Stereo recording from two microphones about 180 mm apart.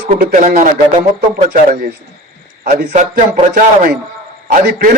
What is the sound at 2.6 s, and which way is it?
Speech, 40° right (ahead or behind).